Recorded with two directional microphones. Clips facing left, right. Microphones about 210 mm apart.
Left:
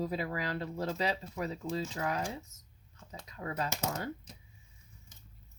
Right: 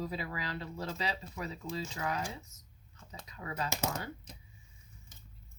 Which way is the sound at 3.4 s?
40° left (ahead or behind).